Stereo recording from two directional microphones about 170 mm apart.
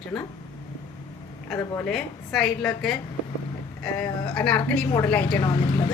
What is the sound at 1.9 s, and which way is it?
A woman's voice, centre (ahead or behind).